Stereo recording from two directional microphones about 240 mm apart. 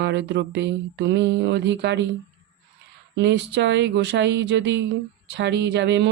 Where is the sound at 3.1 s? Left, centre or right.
Right.